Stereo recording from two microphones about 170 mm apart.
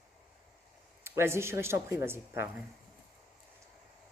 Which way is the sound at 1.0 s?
15° right (ahead or behind).